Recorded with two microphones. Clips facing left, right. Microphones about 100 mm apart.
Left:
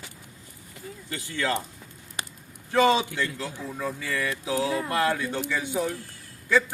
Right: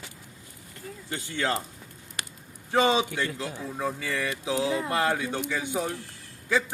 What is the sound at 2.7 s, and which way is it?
A man's voice, 20° right (ahead or behind).